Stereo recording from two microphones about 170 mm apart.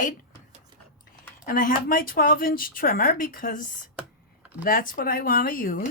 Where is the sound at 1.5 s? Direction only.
55° left (ahead or behind).